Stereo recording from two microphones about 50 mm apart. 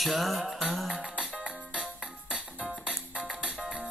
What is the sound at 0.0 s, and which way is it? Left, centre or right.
Music, centre.